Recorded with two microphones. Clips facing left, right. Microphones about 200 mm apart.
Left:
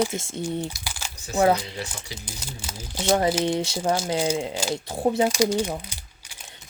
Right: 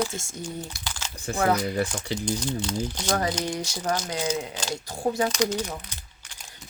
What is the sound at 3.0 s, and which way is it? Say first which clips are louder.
Speech: left 7 dB; 25° left (ahead or behind).